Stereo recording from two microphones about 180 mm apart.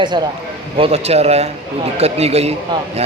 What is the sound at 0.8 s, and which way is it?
Speech, 35° right (ahead or behind).